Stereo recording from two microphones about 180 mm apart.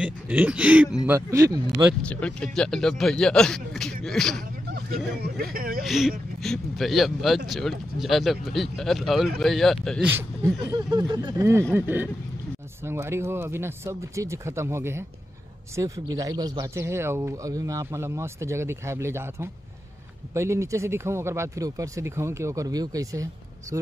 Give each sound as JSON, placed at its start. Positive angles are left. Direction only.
{"t": 0.0, "sound": "speech", "side_deg": -5}
{"t": 2.0, "sound": "a man's voice", "side_deg": 5}
{"t": 5.2, "sound": "speech", "side_deg": -55}
{"t": 5.9, "sound": "a man's voice", "side_deg": 0}
{"t": 10.0, "sound": "speech", "side_deg": -15}
{"t": 11.7, "sound": "speech", "side_deg": -10}